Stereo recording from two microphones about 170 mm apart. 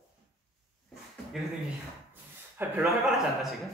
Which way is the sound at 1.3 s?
Centre (ahead or behind).